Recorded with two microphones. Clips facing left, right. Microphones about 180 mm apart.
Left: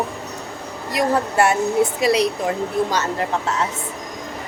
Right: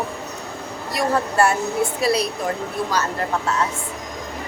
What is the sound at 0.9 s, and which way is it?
A woman's voice, 20° left (ahead or behind).